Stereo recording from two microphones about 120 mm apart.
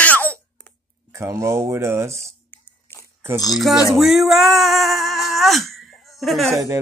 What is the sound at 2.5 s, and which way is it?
Biting, 20° left (ahead or behind).